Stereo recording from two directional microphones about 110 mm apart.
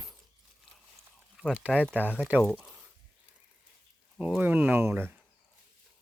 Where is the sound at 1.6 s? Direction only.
10° left (ahead or behind).